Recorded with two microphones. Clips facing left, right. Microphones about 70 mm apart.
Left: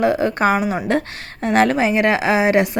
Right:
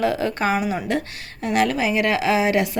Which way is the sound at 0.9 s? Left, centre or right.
Left.